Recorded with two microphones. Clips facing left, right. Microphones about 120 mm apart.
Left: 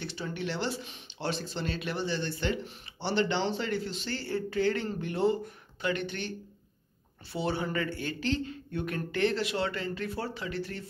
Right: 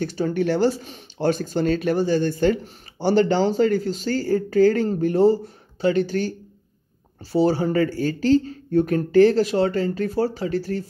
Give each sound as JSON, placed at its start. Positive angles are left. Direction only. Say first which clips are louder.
{"t": 0.0, "sound": "speech", "louder": "right 13 dB", "side_deg": -45}
{"t": 7.3, "sound": "speech", "louder": "right 12 dB", "side_deg": -35}